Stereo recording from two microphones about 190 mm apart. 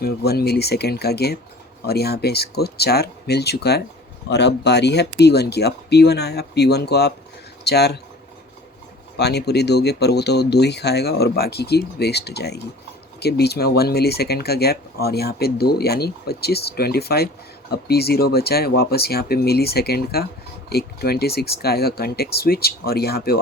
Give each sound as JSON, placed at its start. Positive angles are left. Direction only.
{"t": 0.0, "sound": "speech", "side_deg": 55}
{"t": 9.1, "sound": "speech", "side_deg": 60}